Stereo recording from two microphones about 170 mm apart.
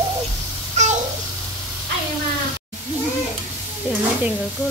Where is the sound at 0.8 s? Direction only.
40° right (ahead or behind).